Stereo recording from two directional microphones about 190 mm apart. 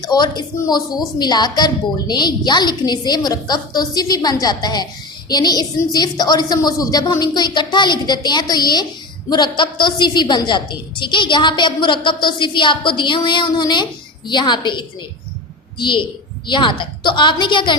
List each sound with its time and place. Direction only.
0.0 s a woman's voice: 20° left (ahead or behind)